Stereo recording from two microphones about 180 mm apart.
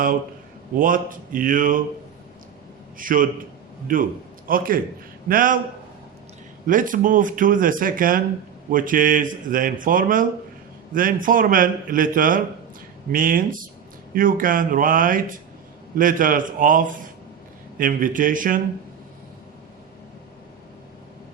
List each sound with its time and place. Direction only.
0.8 s speech: 50° right (ahead or behind)
3.0 s speech: 50° right (ahead or behind)
6.7 s speech: 50° right (ahead or behind)